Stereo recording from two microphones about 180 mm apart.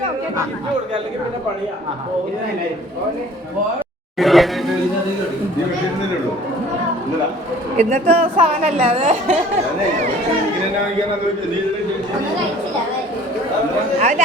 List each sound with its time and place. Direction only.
4.2 s a sound: centre (ahead or behind)
7.8 s speech: 40° right (ahead or behind)
14.0 s chatter: 40° right (ahead or behind)